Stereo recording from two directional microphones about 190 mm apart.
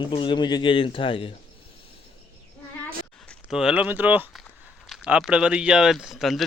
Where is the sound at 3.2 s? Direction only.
5° right (ahead or behind).